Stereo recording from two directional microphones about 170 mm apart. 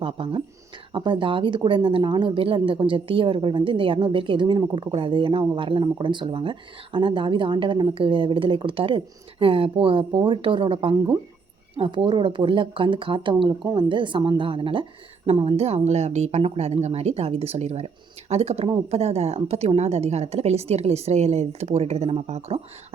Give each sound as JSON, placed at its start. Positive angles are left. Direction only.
{"t": 0.0, "sound": "a woman's voice", "side_deg": -30}